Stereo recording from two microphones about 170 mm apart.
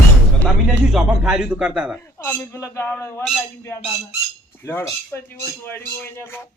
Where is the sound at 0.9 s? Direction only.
5° right (ahead or behind).